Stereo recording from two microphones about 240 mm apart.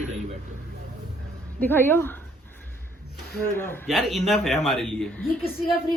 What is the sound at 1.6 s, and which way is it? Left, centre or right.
Speech, centre.